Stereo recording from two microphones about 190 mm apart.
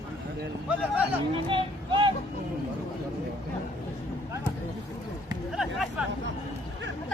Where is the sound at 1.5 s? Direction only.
25° right (ahead or behind).